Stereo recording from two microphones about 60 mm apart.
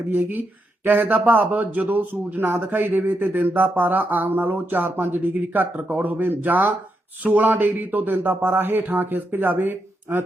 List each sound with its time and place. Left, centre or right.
0.1 s speech: right